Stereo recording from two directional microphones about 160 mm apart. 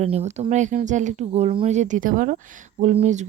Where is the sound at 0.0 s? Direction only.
40° right (ahead or behind).